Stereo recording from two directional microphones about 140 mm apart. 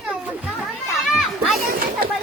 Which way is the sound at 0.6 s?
Centre (ahead or behind).